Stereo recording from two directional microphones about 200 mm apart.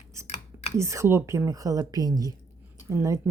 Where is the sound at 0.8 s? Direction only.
15° right (ahead or behind).